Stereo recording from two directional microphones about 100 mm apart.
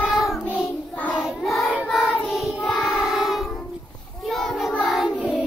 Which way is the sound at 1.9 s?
Centre (ahead or behind).